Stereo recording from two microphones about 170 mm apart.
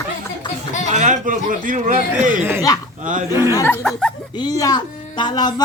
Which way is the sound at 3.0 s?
50° right (ahead or behind).